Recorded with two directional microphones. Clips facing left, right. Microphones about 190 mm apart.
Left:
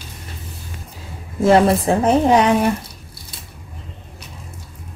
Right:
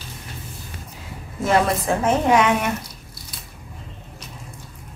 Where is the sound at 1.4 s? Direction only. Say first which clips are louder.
Left 6 dB; 30° left (ahead or behind).